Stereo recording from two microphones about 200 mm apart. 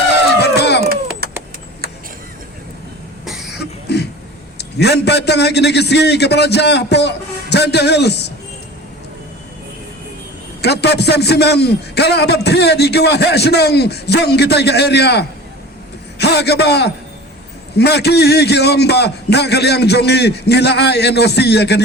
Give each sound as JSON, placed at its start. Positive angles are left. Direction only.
{"t": 0.3, "sound": "a sound", "side_deg": 55}
{"t": 3.6, "sound": "cough", "side_deg": 55}
{"t": 4.5, "sound": "a man's voice", "side_deg": 55}
{"t": 10.6, "sound": "a man's voice", "side_deg": 55}